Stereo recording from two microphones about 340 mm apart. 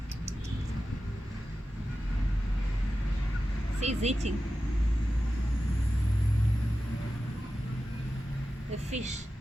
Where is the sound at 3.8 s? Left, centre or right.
Centre.